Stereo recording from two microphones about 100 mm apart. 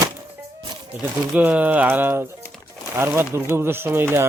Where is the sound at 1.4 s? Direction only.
15° right (ahead or behind).